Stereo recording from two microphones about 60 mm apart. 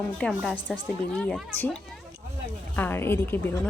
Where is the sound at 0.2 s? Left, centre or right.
Centre.